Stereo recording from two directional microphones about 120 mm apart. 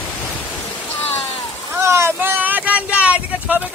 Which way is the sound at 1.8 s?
20° right (ahead or behind).